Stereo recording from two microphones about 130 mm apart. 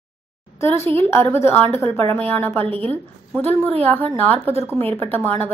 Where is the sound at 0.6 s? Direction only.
20° left (ahead or behind).